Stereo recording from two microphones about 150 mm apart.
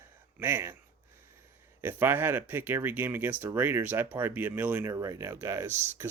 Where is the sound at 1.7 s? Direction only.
15° right (ahead or behind).